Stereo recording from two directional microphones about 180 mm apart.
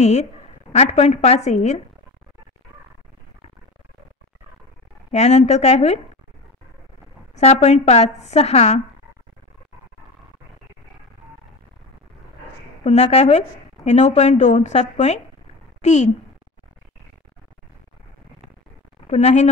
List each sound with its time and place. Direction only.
0.0 s a woman's voice: 40° left (ahead or behind)
5.1 s a woman's voice: 40° left (ahead or behind)
7.3 s a woman's voice: 35° left (ahead or behind)
12.8 s a woman's voice: 35° left (ahead or behind)
19.0 s a woman's voice: 35° left (ahead or behind)